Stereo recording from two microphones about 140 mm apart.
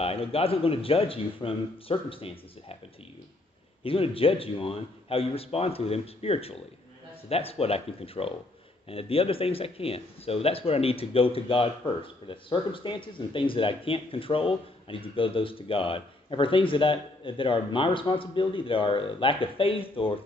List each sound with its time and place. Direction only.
0.0 s a man's voice: 45° left (ahead or behind)
3.8 s a man's voice: 40° left (ahead or behind)